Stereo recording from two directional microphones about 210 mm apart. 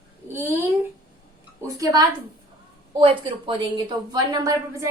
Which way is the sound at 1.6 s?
15° right (ahead or behind).